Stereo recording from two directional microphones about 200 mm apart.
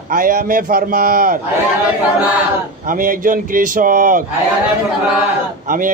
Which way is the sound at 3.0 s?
45° right (ahead or behind).